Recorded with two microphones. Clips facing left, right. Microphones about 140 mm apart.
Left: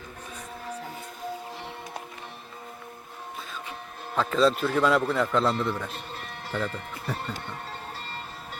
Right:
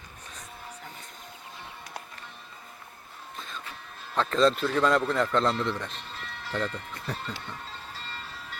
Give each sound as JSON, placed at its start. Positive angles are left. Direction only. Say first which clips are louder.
{"t": 4.1, "sound": "a man's voice", "louder": "left 1 dB", "side_deg": 5}
{"t": 5.9, "sound": "music", "louder": "left 3 dB", "side_deg": 50}